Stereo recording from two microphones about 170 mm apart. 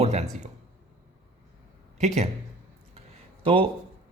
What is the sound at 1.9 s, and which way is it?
Speech, 40° right (ahead or behind).